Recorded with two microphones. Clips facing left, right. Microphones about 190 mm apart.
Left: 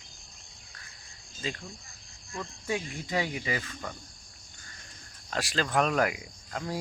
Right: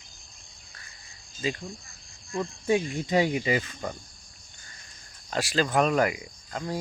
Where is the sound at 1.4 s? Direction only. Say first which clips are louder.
Right 6 dB; 10° right (ahead or behind).